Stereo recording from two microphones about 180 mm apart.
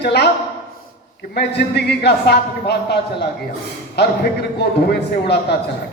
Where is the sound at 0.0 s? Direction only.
65° left (ahead or behind).